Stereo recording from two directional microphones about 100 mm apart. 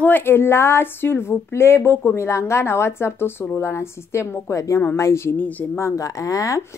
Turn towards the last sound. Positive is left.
turn(degrees=35)  # may be behind; listen again after turning